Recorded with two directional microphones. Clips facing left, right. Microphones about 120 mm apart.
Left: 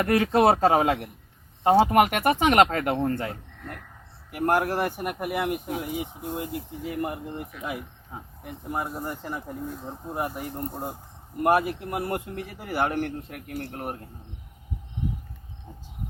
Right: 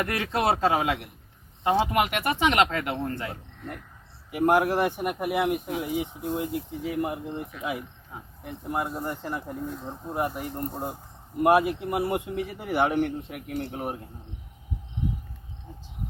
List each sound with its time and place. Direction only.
0.0 s speech: 35° left (ahead or behind)
4.3 s speech: centre (ahead or behind)
8.1 s speech: 30° left (ahead or behind)
8.4 s speech: centre (ahead or behind)